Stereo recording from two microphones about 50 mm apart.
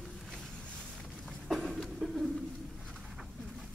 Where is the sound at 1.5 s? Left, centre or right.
Centre.